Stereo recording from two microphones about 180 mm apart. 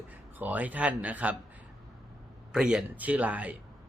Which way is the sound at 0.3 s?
10° right (ahead or behind).